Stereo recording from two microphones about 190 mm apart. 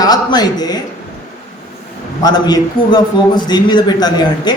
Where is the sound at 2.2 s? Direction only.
20° left (ahead or behind).